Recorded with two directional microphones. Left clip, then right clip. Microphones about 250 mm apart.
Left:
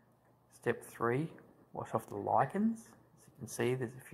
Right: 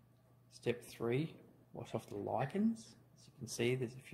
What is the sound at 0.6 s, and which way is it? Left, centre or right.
Speech, centre.